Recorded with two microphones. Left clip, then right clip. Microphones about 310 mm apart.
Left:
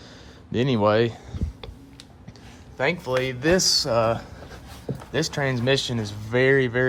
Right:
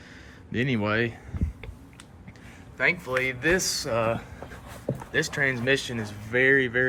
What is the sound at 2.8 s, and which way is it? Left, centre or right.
Speech, centre.